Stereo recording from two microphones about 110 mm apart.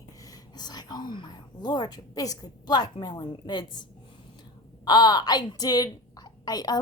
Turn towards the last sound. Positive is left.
turn(degrees=35)  # may be behind; listen again after turning